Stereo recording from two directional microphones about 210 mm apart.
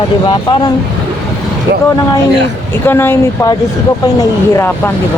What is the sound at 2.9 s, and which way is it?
Speech, 10° left (ahead or behind).